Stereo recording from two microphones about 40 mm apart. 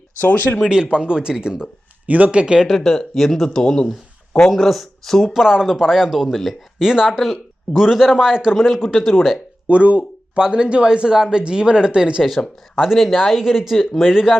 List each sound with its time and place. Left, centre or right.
0.2 s speech: left
0.7 s speech: centre
2.0 s speech: right
2.6 s a man's voice: centre
3.4 s a man's voice: centre
4.5 s a man's voice: centre
5.2 s speech: centre
6.3 s a man's voice: centre
6.7 s a man's voice: centre
9.6 s speech: right
12.8 s a man's voice: centre